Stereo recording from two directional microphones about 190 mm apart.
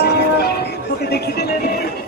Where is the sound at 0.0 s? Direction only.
55° left (ahead or behind).